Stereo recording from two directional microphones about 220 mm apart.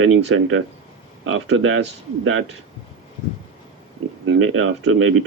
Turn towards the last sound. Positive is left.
turn(degrees=-70)  # may be behind; listen again after turning